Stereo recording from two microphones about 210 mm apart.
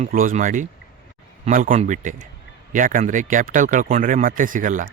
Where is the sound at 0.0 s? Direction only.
40° right (ahead or behind).